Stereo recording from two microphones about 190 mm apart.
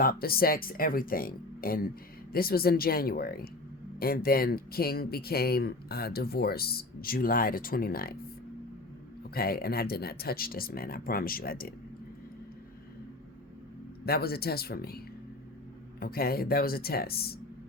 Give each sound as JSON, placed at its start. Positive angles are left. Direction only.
{"t": 0.0, "sound": "speech", "side_deg": 50}
{"t": 9.3, "sound": "speech", "side_deg": 50}
{"t": 14.0, "sound": "speech", "side_deg": 55}